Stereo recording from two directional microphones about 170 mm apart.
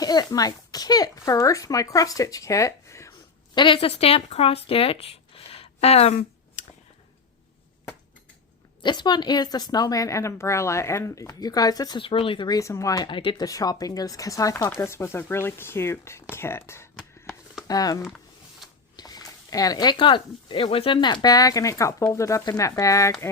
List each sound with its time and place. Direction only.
0.0 s a woman's voice: 25° left (ahead or behind)
3.5 s speech: 30° left (ahead or behind)
8.8 s a woman's voice: 25° left (ahead or behind)
16.9 s a sound: 5° right (ahead or behind)
17.7 s a woman's voice: 20° left (ahead or behind)
18.9 s a sound: 25° left (ahead or behind)
19.5 s a woman's voice: 20° left (ahead or behind)